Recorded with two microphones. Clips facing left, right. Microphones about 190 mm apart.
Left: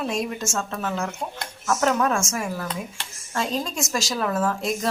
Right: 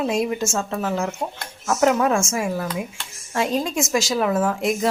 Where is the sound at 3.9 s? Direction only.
20° right (ahead or behind).